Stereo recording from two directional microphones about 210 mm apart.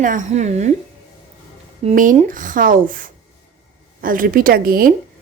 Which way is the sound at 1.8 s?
35° right (ahead or behind).